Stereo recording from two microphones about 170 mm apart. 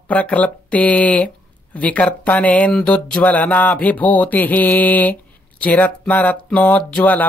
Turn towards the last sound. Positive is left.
turn(degrees=10)  # may be behind; listen again after turning